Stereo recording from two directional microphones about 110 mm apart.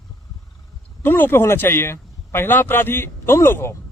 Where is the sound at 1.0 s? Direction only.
20° left (ahead or behind).